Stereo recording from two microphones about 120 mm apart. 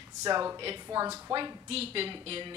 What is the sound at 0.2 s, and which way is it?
A woman's voice, 30° right (ahead or behind).